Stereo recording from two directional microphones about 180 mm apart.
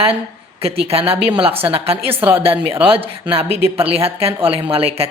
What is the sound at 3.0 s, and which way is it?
Speech, 30° right (ahead or behind).